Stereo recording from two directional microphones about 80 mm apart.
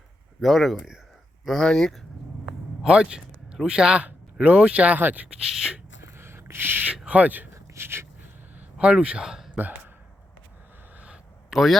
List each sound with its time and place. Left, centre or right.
0.4 s speech: centre
2.8 s speech: centre
5.4 s speech: centre
6.1 s a sound: right
6.9 s speech: centre
7.5 s a sound: right; by 9.5 s centre
9.6 s speech: right
10.9 s a sound: centre
11.5 s speech: centre